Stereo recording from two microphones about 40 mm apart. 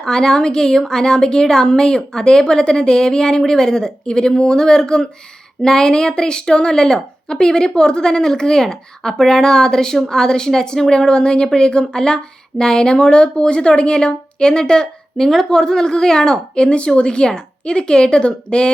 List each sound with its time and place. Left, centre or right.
0.0 s a woman's voice: centre
16.6 s speech: left